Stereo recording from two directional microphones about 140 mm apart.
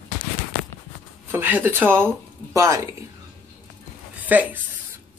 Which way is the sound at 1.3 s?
15° right (ahead or behind).